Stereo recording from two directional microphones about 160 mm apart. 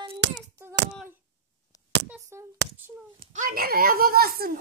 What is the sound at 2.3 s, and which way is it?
Speech, 15° right (ahead or behind).